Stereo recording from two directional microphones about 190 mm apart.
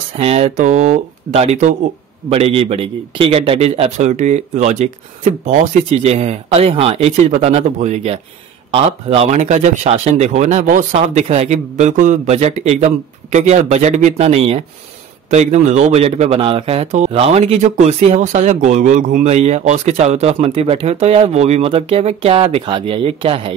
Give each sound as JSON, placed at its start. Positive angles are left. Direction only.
{"t": 0.2, "sound": "a man's voice", "side_deg": -35}